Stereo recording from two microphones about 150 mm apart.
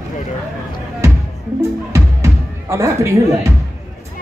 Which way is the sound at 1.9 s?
20° right (ahead or behind).